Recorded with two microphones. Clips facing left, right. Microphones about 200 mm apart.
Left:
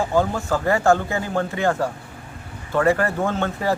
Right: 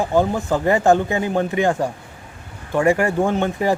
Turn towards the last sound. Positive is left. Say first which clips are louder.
# right 3 dB
turn(degrees=-15)  # may be behind; listen again after turning